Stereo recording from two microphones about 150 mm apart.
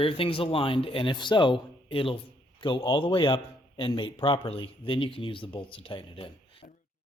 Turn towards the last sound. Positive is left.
turn(degrees=35)  # may be behind; listen again after turning